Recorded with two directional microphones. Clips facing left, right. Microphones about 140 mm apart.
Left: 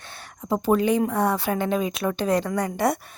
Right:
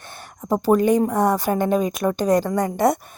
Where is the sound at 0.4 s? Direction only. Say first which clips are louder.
Right 4 dB; 45° right (ahead or behind).